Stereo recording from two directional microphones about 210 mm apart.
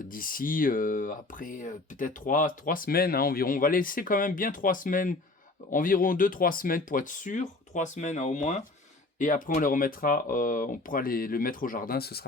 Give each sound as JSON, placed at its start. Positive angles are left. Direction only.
{"t": 0.1, "sound": "speech", "side_deg": 40}